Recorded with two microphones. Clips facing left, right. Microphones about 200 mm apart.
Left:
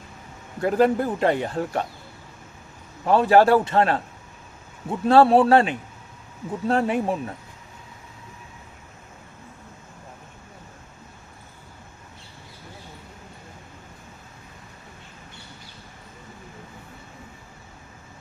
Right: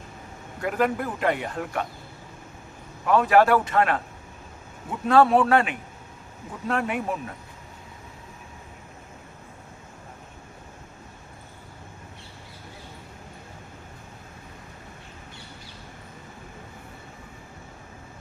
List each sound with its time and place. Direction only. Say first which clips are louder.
0.6 s speech: left 5 dB; 30° left (ahead or behind)
3.1 s speech: left 2 dB; 30° left (ahead or behind)